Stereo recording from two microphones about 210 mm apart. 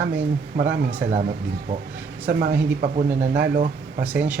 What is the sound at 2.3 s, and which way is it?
Speech, 50° right (ahead or behind).